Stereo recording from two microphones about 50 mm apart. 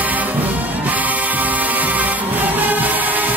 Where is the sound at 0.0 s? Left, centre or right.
Right.